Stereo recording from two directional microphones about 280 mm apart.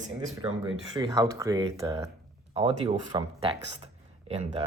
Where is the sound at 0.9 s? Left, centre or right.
Centre.